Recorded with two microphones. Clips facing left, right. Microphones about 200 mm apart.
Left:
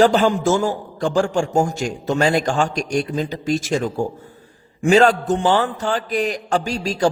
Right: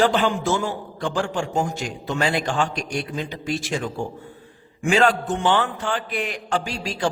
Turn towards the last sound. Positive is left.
turn(degrees=40)  # may be behind; listen again after turning